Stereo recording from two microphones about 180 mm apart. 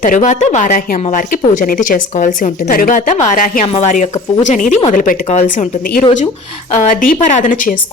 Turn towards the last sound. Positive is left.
turn(degrees=50)  # may be behind; listen again after turning